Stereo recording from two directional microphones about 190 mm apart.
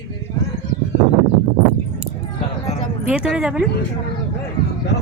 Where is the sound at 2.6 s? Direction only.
35° left (ahead or behind).